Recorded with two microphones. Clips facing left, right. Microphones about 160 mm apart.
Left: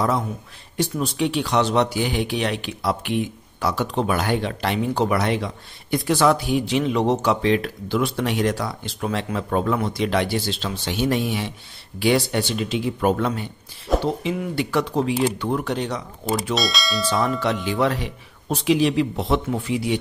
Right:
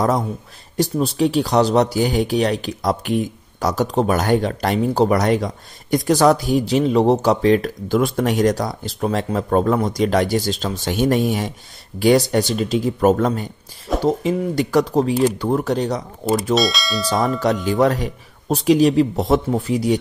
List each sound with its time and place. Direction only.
0.7 s speech: 35° right (ahead or behind)
16.5 s speech: centre (ahead or behind)
17.6 s speech: 45° right (ahead or behind)